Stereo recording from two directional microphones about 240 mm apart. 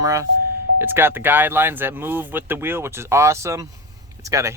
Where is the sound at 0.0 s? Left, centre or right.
Centre.